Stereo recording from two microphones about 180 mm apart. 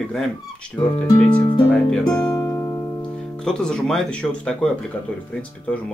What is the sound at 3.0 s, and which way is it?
Speech, 5° left (ahead or behind).